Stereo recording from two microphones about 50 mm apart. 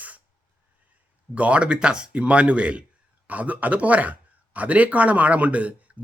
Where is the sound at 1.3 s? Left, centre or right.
Right.